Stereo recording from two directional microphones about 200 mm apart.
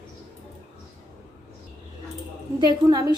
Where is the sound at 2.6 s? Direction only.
20° right (ahead or behind).